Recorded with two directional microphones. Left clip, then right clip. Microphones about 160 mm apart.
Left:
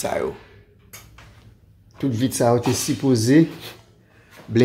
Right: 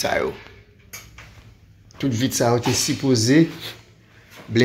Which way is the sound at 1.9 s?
30° left (ahead or behind).